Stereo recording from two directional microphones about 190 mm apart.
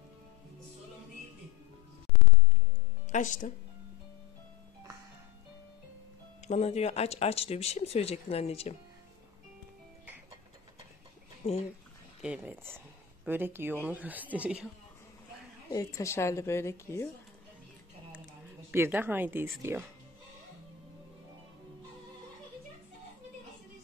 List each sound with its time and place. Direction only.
3.1 s speech: 40° left (ahead or behind)
6.4 s speech: 35° left (ahead or behind)
11.4 s speech: 35° left (ahead or behind)
12.2 s speech: 5° right (ahead or behind)
15.7 s a woman's voice: 15° left (ahead or behind)
18.7 s speech: 10° right (ahead or behind)